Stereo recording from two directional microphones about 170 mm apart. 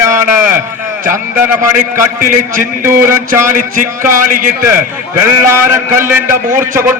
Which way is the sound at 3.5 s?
50° right (ahead or behind).